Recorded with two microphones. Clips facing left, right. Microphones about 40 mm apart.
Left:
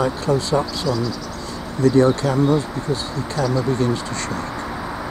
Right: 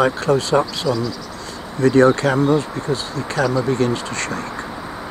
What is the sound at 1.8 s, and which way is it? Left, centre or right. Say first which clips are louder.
Speech: right 2 dB; right.